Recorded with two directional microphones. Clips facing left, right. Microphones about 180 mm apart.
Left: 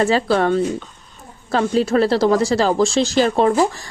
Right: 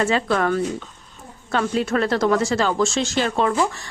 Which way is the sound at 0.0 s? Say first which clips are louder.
Left 4 dB; 35° left (ahead or behind).